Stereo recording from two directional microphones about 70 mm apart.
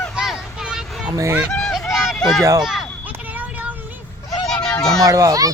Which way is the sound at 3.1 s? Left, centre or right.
Right.